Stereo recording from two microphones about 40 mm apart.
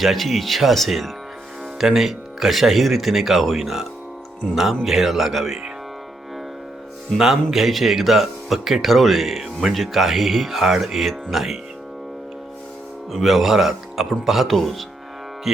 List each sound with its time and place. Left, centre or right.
0.0 s speech: centre
7.5 s speech: centre
13.1 s speech: centre